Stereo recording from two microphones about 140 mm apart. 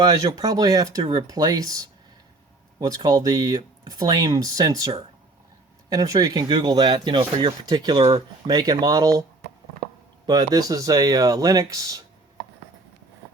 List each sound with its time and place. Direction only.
0.3 s speech: 25° right (ahead or behind)
2.8 s speech: 25° right (ahead or behind)
5.9 s speech: 25° right (ahead or behind)
10.2 s speech: 30° right (ahead or behind)